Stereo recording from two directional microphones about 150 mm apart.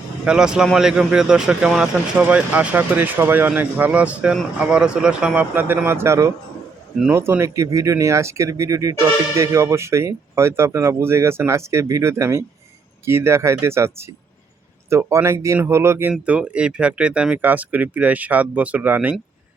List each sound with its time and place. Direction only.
0.3 s speech: 5° right (ahead or behind)